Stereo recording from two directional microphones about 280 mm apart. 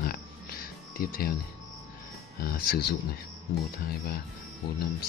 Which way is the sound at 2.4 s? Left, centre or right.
Left.